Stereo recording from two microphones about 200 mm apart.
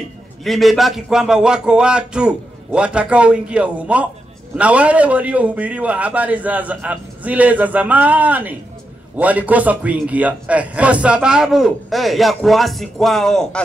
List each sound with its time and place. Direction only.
0.4 s a man's voice: centre (ahead or behind)